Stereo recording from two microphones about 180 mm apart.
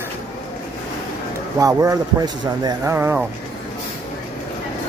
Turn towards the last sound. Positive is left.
turn(degrees=-15)  # may be behind; listen again after turning